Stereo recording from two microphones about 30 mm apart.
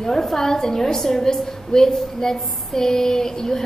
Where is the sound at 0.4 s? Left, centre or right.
Centre.